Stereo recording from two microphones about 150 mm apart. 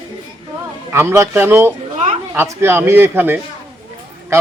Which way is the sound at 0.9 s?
15° right (ahead or behind).